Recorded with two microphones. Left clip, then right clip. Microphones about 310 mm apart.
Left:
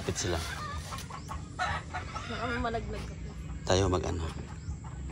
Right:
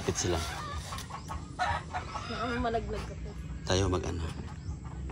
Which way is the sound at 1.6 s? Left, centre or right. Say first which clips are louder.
Right 2 dB; right.